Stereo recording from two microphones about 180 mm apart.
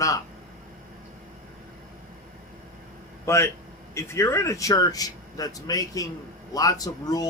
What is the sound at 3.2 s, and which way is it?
Speech, 15° left (ahead or behind).